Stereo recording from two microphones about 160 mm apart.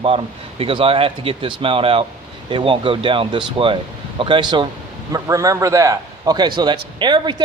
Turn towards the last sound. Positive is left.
turn(degrees=-25)  # may be behind; listen again after turning